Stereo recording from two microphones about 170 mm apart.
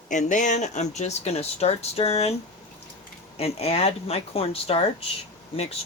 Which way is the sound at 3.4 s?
40° left (ahead or behind).